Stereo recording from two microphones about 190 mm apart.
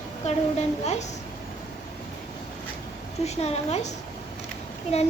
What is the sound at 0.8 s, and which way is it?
Child singing, 35° left (ahead or behind).